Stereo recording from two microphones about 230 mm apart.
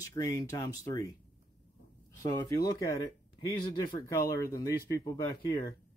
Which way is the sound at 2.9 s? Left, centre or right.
Centre.